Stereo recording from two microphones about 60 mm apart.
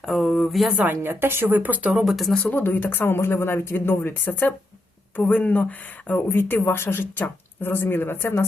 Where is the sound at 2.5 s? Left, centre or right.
Left.